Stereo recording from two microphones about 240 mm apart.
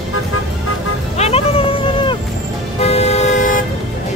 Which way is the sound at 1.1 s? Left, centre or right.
Left.